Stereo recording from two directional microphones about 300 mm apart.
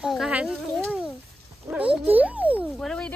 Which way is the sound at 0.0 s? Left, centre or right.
Centre.